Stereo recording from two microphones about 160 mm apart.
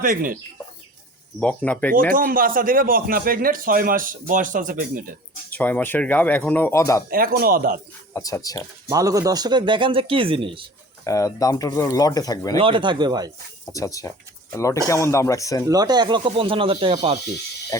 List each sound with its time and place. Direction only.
0.0 s a man's voice: 55° right (ahead or behind)
1.4 s speech: 5° left (ahead or behind)
2.1 s a man's voice: 60° right (ahead or behind)
5.5 s speech: 10° left (ahead or behind)
7.1 s a man's voice: 65° right (ahead or behind)
8.1 s speech: 20° left (ahead or behind)
8.9 s a man's voice: 20° right (ahead or behind)
11.0 s speech: 20° left (ahead or behind)
12.5 s speech: 30° right (ahead or behind)
13.7 s speech: 20° left (ahead or behind)
15.7 s a man's voice: 25° right (ahead or behind); by 17.2 s 40° right (ahead or behind)